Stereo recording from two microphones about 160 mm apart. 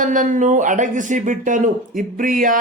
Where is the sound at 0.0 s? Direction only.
55° right (ahead or behind).